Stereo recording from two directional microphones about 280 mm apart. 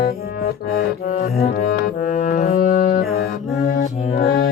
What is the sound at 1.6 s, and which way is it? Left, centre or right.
Music, left.